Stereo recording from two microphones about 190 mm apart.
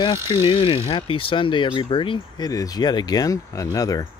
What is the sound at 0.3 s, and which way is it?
Speech, 25° left (ahead or behind).